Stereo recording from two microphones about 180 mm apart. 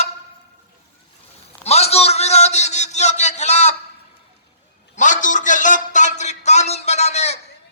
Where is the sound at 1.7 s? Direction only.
35° left (ahead or behind).